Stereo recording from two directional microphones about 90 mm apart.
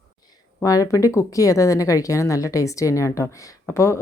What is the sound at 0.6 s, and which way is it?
Speech, 40° left (ahead or behind).